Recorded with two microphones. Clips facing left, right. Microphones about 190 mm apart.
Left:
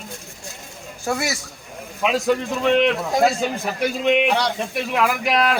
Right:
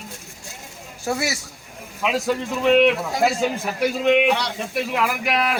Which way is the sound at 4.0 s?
30° left (ahead or behind).